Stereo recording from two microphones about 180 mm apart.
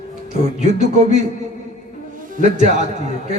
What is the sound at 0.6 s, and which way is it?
Music, 40° right (ahead or behind).